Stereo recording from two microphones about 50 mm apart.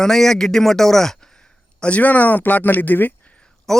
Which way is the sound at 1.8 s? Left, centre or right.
Left.